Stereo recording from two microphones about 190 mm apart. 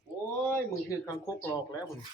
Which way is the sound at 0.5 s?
10° left (ahead or behind).